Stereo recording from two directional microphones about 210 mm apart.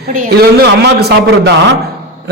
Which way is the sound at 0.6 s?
50° right (ahead or behind).